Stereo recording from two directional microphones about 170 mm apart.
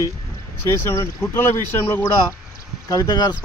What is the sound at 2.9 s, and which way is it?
Speech, 25° left (ahead or behind).